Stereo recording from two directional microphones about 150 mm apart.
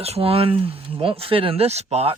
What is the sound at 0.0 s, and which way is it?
Speech, 40° right (ahead or behind).